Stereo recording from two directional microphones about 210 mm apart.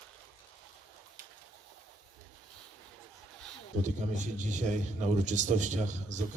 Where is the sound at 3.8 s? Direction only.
35° right (ahead or behind).